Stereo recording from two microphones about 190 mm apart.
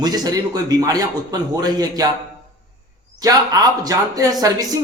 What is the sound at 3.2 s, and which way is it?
A man's voice, 20° right (ahead or behind).